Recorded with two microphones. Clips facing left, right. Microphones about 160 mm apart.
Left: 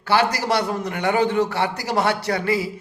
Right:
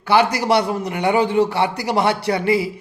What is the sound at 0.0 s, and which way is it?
Speech, 15° right (ahead or behind).